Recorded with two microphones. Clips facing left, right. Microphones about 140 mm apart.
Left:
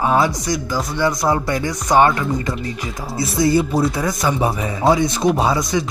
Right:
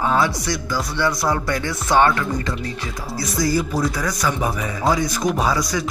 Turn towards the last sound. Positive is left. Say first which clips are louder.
# left 3 dB
turn(degrees=25)  # may be behind; listen again after turning